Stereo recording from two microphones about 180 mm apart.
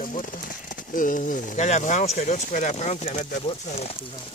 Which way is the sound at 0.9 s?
50° left (ahead or behind).